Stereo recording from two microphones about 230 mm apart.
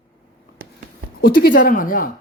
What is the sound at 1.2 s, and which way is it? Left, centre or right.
Speech, left.